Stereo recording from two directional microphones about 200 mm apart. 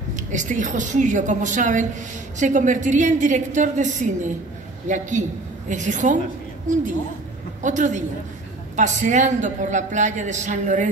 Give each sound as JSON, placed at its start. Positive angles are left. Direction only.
{"t": 0.1, "sound": "a woman's voice", "side_deg": -40}